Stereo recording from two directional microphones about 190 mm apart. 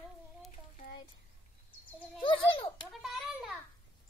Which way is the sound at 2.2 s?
25° left (ahead or behind).